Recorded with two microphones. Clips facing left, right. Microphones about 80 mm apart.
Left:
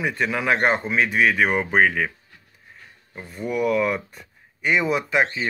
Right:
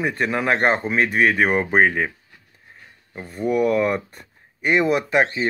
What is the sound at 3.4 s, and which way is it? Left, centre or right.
Speech, right.